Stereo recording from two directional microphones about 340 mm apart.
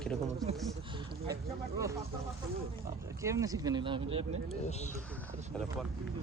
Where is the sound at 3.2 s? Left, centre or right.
Centre.